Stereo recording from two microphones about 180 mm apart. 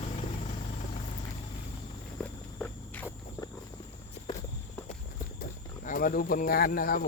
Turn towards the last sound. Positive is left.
turn(degrees=55)  # may be behind; listen again after turning